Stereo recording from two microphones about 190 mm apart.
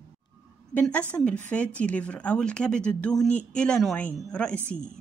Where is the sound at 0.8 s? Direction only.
5° left (ahead or behind).